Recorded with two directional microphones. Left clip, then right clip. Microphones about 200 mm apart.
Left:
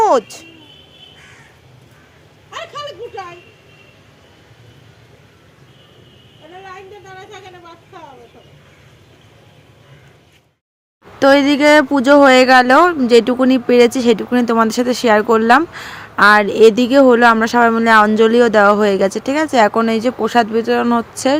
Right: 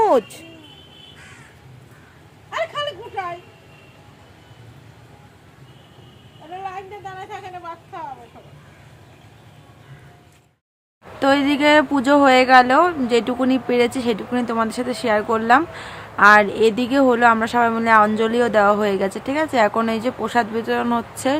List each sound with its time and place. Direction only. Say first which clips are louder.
0.0 s a child's voice: left 3 dB; centre (ahead or behind)
11.2 s speech: left 6 dB; 30° left (ahead or behind)